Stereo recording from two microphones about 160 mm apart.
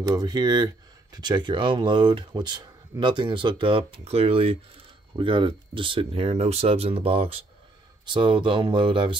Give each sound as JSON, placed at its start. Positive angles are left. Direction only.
{"t": 0.0, "sound": "speech", "side_deg": -25}